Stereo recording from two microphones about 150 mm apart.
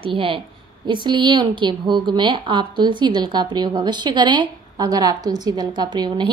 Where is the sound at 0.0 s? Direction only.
35° right (ahead or behind).